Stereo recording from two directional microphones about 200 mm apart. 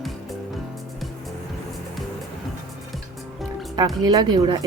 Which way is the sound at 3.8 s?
20° right (ahead or behind).